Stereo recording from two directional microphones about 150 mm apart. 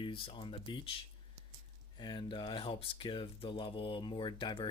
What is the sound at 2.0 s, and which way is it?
Speech, 30° left (ahead or behind).